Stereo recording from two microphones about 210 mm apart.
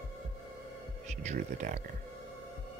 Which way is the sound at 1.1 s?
35° right (ahead or behind).